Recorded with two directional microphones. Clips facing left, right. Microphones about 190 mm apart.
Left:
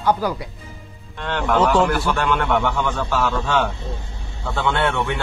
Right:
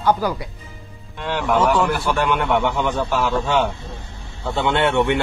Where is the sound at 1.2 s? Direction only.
10° right (ahead or behind).